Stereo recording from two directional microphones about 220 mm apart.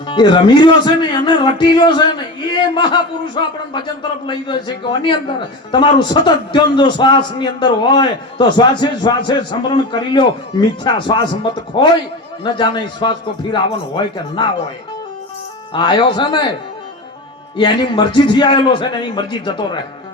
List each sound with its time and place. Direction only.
0.1 s a man's voice: 20° left (ahead or behind)
15.7 s a man's voice: 20° left (ahead or behind)
17.6 s a man's voice: 20° left (ahead or behind)